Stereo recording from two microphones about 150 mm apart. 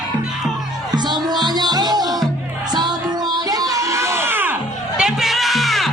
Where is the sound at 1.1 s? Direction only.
30° right (ahead or behind).